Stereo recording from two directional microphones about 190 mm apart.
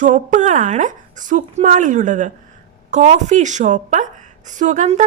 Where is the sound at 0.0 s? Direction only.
40° right (ahead or behind).